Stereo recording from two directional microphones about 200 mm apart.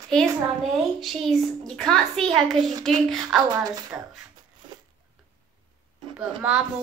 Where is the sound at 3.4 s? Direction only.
20° right (ahead or behind).